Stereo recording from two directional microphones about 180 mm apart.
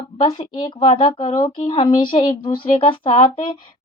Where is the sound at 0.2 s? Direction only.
25° left (ahead or behind).